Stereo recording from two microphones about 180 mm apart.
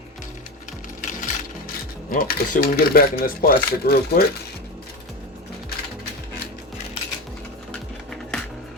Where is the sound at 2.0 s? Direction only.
55° left (ahead or behind).